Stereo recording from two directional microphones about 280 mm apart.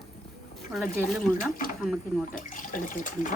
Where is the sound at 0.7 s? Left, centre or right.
Centre.